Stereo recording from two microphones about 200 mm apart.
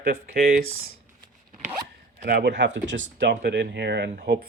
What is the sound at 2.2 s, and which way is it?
Speech, 55° right (ahead or behind).